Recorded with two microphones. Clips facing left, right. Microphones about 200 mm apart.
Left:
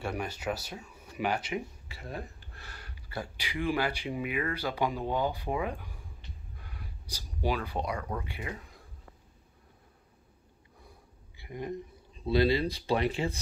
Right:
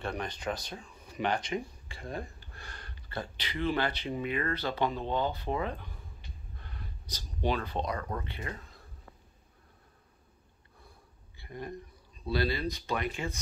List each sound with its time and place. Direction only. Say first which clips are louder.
0.0 s speech: left 1 dB; 10° left (ahead or behind)
11.3 s speech: left 4 dB; 15° left (ahead or behind); by 13.4 s 30° left (ahead or behind)